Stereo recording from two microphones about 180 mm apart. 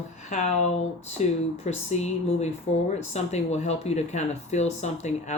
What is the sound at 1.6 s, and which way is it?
Speech, 35° left (ahead or behind).